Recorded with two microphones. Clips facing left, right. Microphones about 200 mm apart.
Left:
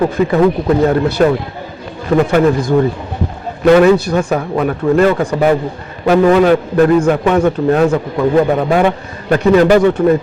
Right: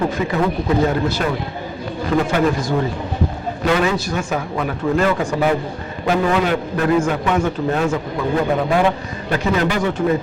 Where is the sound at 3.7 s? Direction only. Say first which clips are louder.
Left 12 dB; 55° left (ahead or behind).